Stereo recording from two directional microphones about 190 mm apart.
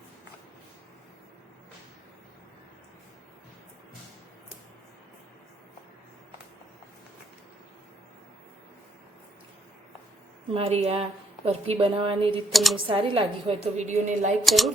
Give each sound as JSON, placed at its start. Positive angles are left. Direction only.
{"t": 10.5, "sound": "a woman's voice", "side_deg": -30}
{"t": 12.5, "sound": "speech", "side_deg": 0}
{"t": 12.9, "sound": "a woman's voice", "side_deg": -30}
{"t": 14.4, "sound": "speech", "side_deg": 0}